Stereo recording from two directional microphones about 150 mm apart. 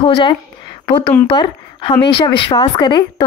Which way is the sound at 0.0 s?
35° left (ahead or behind).